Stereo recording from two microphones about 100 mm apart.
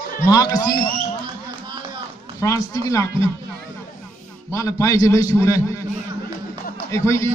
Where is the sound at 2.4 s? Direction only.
35° left (ahead or behind).